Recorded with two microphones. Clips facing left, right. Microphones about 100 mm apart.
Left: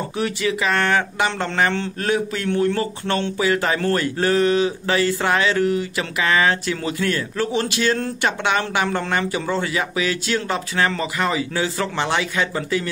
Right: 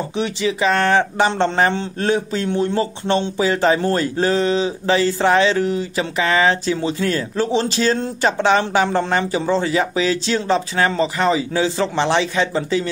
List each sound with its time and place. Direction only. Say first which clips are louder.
0.1 s speech: even; 20° right (ahead or behind)